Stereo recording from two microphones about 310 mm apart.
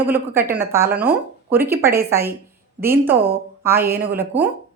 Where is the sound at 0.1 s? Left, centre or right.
Centre.